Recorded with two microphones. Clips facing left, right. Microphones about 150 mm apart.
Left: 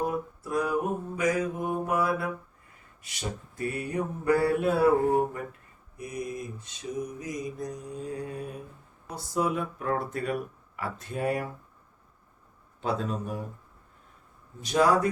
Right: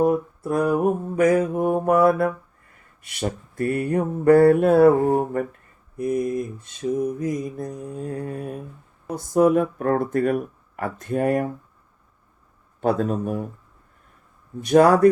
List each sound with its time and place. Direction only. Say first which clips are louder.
0.0 s mantra: right 10 dB; 55° right (ahead or behind)
12.8 s mantra: right 8 dB; 50° right (ahead or behind)
14.6 s speech: right 9 dB; 55° right (ahead or behind)